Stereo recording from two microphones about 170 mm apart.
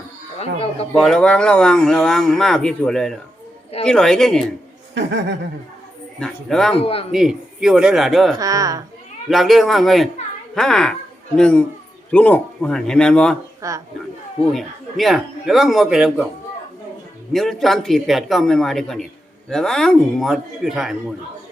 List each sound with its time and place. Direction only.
0.9 s speech: centre (ahead or behind)
4.9 s speech: 90° right
6.1 s speech: 5° left (ahead or behind)
6.7 s speech: 35° left (ahead or behind)
7.1 s speech: 5° right (ahead or behind)
8.4 s speech: 20° right (ahead or behind)
9.3 s speech: centre (ahead or behind)
13.6 s a woman's voice: 20° right (ahead or behind)
14.5 s speech: centre (ahead or behind)
17.3 s speech: centre (ahead or behind)